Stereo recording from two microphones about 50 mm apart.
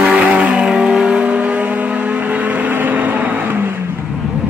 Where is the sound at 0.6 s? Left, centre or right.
Centre; by 3.6 s right.